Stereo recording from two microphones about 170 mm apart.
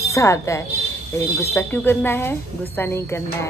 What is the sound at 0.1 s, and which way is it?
A woman's voice, 20° left (ahead or behind).